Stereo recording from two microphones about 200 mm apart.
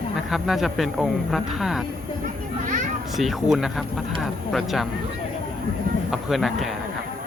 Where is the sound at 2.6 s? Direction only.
40° right (ahead or behind).